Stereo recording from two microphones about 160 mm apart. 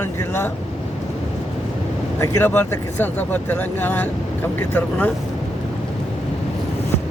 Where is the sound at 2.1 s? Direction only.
15° left (ahead or behind).